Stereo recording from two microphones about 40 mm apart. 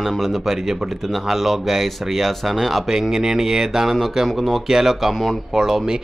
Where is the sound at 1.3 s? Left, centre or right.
Centre.